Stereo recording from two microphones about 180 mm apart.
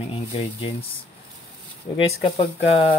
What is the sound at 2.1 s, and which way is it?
Speech, 35° left (ahead or behind).